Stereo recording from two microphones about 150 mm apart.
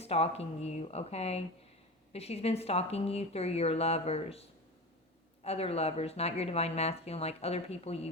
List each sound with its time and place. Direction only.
0.0 s speech: 45° left (ahead or behind)